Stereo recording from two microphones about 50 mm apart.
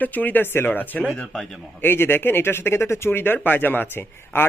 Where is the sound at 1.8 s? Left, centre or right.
Left.